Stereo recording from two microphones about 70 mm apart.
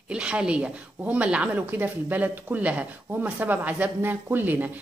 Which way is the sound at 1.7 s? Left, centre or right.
Right.